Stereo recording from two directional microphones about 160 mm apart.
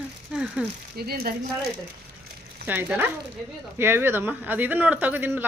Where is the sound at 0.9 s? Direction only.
75° right (ahead or behind).